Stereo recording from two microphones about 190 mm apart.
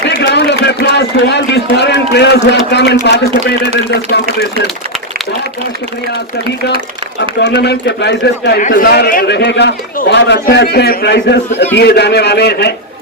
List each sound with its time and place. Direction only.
0.1 s run: 60° left (ahead or behind)
7.4 s a man's voice: 60° left (ahead or behind)